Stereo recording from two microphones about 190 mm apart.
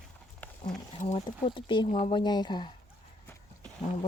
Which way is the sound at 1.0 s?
40° left (ahead or behind).